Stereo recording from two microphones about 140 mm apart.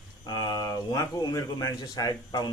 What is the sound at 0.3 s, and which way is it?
Speech, 30° left (ahead or behind).